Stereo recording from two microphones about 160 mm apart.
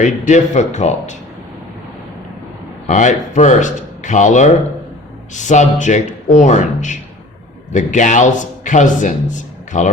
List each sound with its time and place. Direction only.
0.0 s a man's voice: 50° left (ahead or behind)
2.8 s a man's voice: 50° left (ahead or behind)